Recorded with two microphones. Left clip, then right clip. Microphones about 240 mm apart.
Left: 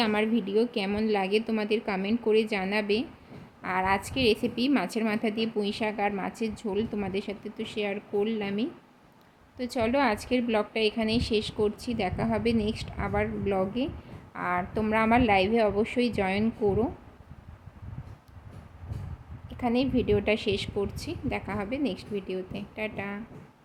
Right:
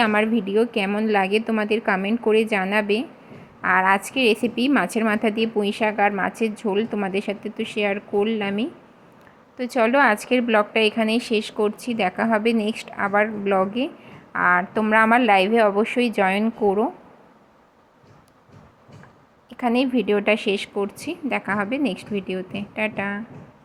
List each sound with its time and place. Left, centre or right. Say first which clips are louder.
0.0 s a woman's voice: right 7 dB; centre
19.5 s a woman's voice: right 6 dB; centre